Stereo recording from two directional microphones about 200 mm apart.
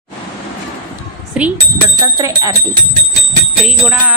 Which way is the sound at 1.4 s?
5° right (ahead or behind).